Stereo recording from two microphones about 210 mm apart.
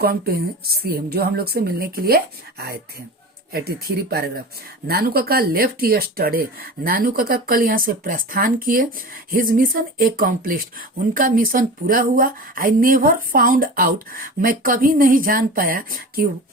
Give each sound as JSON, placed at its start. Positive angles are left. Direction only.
{"t": 0.0, "sound": "speech", "side_deg": -45}